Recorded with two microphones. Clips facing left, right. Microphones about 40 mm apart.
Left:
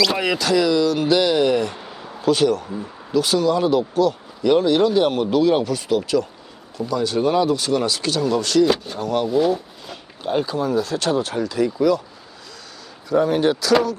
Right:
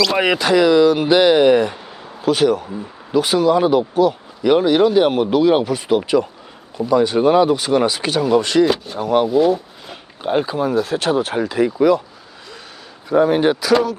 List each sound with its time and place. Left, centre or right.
0.2 s speech: right
1.7 s speech: centre
3.1 s speech: centre
8.6 s speech: centre
9.0 s speech: centre
9.3 s speech: centre
9.9 s speech: right
13.1 s speech: right